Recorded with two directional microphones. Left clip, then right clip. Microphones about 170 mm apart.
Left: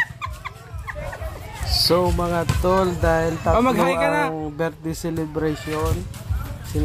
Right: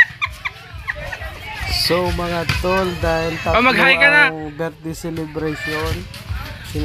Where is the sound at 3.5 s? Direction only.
15° left (ahead or behind).